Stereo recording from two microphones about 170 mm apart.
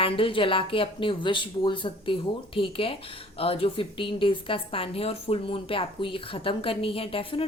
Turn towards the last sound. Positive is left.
turn(degrees=35)  # may be behind; listen again after turning